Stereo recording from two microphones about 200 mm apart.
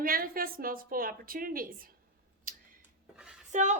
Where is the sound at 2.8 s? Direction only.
5° right (ahead or behind).